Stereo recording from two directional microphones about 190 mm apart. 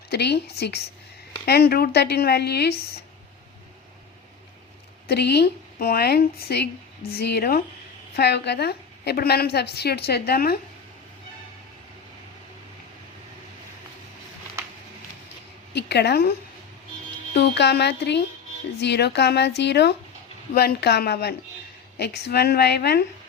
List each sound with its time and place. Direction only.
0.1 s a woman's voice: 60° left (ahead or behind)
5.0 s a woman's voice: 60° left (ahead or behind)
15.7 s a woman's voice: 60° left (ahead or behind)
17.3 s a woman's voice: 65° left (ahead or behind)